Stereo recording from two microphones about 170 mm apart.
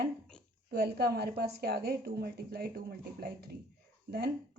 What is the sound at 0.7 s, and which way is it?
Speech, 70° right (ahead or behind).